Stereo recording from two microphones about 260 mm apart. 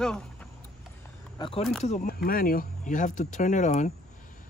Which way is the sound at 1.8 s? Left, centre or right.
Left.